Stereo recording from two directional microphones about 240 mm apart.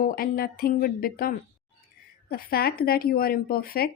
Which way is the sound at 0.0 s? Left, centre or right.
Left.